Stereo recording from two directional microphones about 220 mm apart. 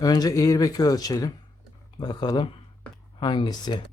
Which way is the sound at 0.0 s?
15° left (ahead or behind).